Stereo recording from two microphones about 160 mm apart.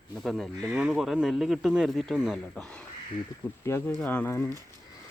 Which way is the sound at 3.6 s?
15° left (ahead or behind).